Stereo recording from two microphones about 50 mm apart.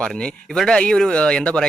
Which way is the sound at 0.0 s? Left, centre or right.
Centre.